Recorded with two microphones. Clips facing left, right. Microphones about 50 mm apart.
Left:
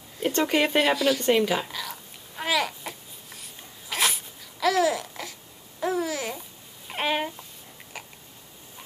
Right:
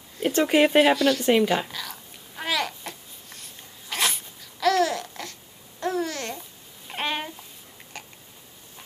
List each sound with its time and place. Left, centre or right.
0.2 s speech: centre
1.7 s babbling: centre
6.9 s a sound: centre
7.9 s biting: centre